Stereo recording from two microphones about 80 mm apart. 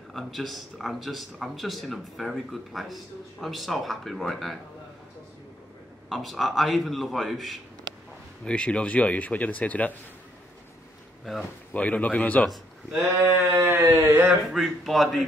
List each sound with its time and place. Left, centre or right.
0.1 s a man's voice: centre
6.0 s a man's voice: centre
8.5 s speech: centre
11.3 s a man's voice: centre
11.7 s speech: centre
12.9 s sheep: right
14.5 s a man's voice: centre